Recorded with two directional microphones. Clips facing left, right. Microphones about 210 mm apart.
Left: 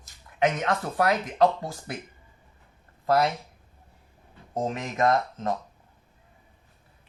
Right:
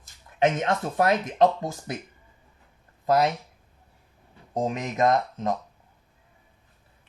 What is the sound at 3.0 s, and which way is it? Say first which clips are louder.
Speech: right 1 dB; 20° right (ahead or behind).